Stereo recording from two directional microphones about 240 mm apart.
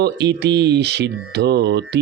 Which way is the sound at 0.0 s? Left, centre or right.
Right.